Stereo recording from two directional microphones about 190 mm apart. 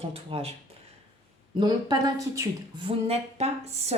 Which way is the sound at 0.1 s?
30° right (ahead or behind).